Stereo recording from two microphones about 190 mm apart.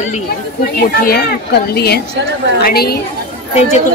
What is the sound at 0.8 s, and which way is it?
A woman's voice, 50° left (ahead or behind).